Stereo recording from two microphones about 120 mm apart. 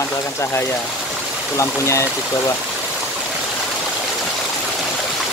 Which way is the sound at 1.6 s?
25° left (ahead or behind).